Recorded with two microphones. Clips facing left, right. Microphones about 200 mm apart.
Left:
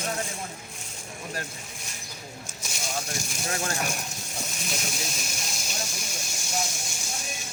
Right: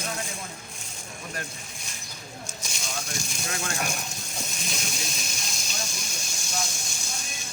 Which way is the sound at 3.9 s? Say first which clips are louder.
Even; 5° left (ahead or behind).